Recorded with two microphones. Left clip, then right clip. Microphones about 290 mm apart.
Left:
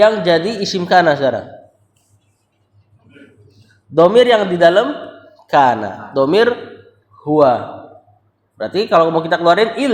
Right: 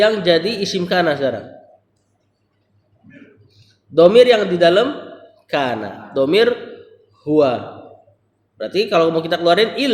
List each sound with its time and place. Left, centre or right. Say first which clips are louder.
0.0 s a woman's voice: left 3 dB; left
3.9 s a woman's voice: even; left
8.5 s a woman's voice: left 3 dB; left